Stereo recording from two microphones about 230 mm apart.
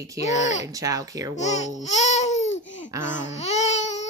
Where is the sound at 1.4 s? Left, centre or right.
Left.